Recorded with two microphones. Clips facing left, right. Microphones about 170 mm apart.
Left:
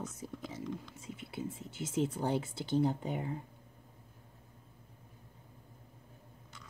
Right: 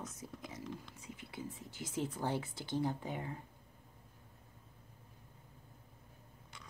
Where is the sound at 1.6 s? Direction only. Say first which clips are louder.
Left 6 dB; 25° left (ahead or behind).